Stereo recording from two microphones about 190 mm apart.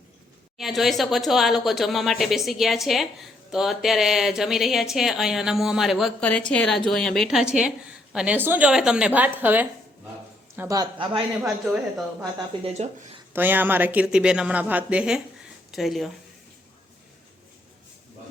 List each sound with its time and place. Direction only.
0.6 s speech: centre (ahead or behind); by 11.2 s 25° right (ahead or behind)
11.4 s speech: centre (ahead or behind)
12.2 s speech: 35° right (ahead or behind)
13.3 s speech: 10° right (ahead or behind)